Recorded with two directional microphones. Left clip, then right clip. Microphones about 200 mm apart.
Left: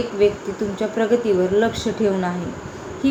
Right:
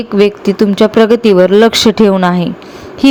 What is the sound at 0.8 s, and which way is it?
Speech, 50° right (ahead or behind).